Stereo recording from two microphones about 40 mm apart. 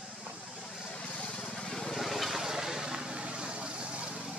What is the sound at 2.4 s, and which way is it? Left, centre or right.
Vehicle, centre.